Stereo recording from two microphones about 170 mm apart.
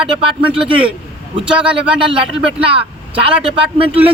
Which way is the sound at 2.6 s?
35° right (ahead or behind).